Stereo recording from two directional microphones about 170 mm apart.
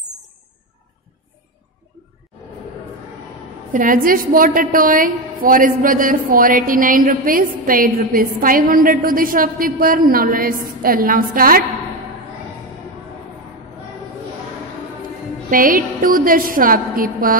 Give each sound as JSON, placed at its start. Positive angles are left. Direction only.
{"t": 3.7, "sound": "a woman's voice", "side_deg": -55}
{"t": 15.5, "sound": "a woman's voice", "side_deg": -55}